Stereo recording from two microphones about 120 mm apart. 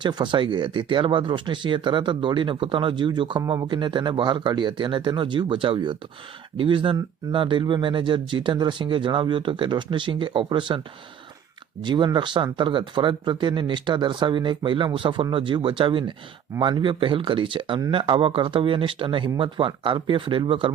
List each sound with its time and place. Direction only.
0.0 s speech: 40° right (ahead or behind)
3.4 s speech: 30° right (ahead or behind)
3.7 s speech: 40° right (ahead or behind)
11.8 s speech: 40° right (ahead or behind)